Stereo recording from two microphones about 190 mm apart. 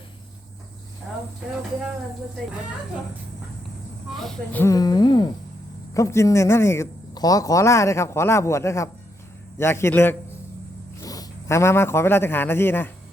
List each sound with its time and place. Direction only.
4.2 s a man's voice: 10° left (ahead or behind)